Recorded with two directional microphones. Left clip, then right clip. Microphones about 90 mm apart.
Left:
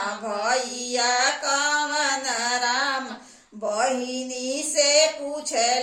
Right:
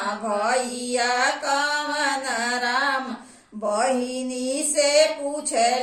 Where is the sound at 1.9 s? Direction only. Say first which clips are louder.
Even; 25° left (ahead or behind).